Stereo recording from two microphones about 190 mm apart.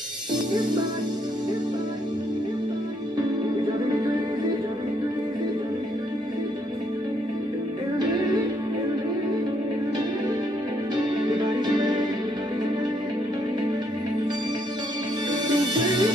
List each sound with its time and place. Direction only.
8.1 s music: 20° right (ahead or behind)
11.1 s music: 25° right (ahead or behind)
15.4 s music: 25° right (ahead or behind)